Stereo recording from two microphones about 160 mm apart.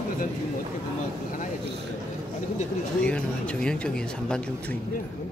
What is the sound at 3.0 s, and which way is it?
Speech, 5° left (ahead or behind).